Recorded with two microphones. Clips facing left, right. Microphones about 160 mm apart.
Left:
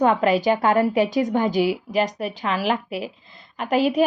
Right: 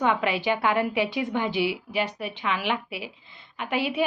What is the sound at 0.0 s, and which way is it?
A woman's voice, 40° left (ahead or behind).